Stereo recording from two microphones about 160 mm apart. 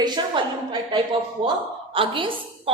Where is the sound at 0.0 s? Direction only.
25° right (ahead or behind).